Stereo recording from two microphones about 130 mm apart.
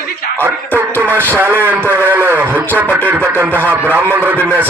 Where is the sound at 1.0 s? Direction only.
15° right (ahead or behind).